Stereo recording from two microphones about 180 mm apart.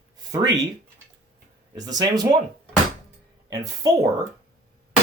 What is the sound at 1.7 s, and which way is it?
Speech, 20° right (ahead or behind).